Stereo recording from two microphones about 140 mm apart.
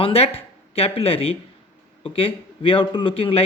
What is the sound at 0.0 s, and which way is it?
Speech, 45° left (ahead or behind).